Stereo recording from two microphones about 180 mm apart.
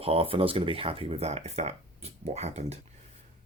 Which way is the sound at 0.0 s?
30° right (ahead or behind).